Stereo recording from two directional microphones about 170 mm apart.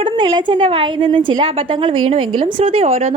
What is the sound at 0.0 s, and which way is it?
A woman's voice, 30° right (ahead or behind).